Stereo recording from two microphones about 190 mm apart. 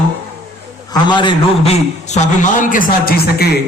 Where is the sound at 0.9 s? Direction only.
25° left (ahead or behind).